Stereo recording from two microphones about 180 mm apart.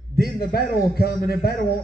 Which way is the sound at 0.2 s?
60° left (ahead or behind).